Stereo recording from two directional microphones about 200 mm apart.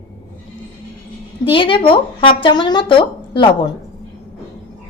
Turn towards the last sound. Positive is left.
turn(degrees=25)  # may be behind; listen again after turning